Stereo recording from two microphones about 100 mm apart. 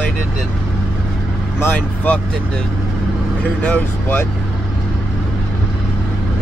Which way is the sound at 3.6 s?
15° left (ahead or behind).